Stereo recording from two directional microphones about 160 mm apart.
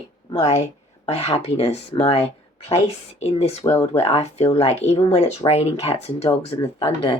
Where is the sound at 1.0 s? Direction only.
40° left (ahead or behind).